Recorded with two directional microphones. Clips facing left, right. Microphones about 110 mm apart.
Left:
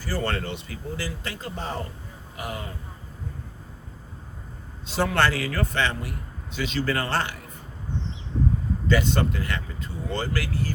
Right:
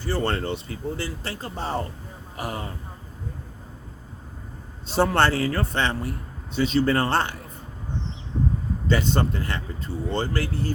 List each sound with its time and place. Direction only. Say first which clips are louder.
0.0 s speech: right 3 dB; 30° right (ahead or behind)
4.9 s speech: right 3 dB; 30° right (ahead or behind)
8.9 s speech: even; 30° right (ahead or behind)